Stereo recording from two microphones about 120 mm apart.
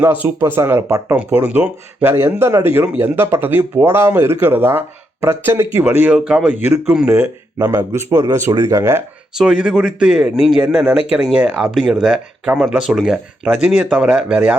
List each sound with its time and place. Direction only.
0.0 s speech: 15° right (ahead or behind)
7.1 s speech: 25° right (ahead or behind)
9.4 s speech: 10° right (ahead or behind)